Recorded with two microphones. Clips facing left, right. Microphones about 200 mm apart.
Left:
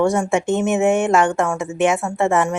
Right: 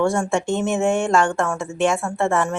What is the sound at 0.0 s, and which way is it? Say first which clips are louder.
Speech: left 2 dB; 20° left (ahead or behind).